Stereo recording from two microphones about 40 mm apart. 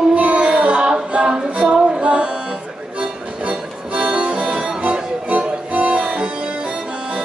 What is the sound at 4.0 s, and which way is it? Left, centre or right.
Music, right.